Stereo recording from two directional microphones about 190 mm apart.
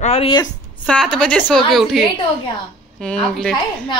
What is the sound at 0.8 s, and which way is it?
Speech, 5° left (ahead or behind).